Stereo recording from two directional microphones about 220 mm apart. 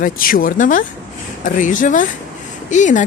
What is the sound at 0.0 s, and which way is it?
Speech, 40° left (ahead or behind).